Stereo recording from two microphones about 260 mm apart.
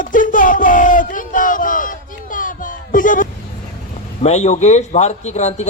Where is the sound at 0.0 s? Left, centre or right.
Left.